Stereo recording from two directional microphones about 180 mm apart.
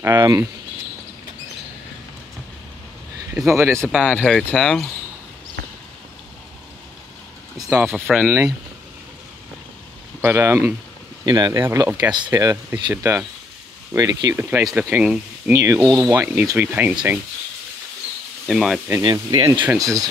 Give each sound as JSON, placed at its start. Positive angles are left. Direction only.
{"t": 0.0, "sound": "speech", "side_deg": -20}
{"t": 3.7, "sound": "speech", "side_deg": 5}
{"t": 7.8, "sound": "speech", "side_deg": -5}
{"t": 10.2, "sound": "speech", "side_deg": -15}
{"t": 18.5, "sound": "speech", "side_deg": -5}
{"t": 18.9, "sound": "speech", "side_deg": -25}